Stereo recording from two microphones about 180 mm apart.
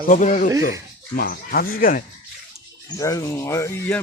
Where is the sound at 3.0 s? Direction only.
20° left (ahead or behind).